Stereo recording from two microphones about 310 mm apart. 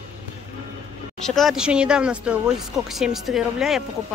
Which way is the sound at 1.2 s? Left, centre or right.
Centre.